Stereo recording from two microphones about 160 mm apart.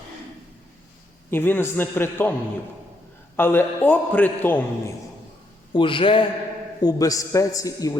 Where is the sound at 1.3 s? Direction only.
15° left (ahead or behind).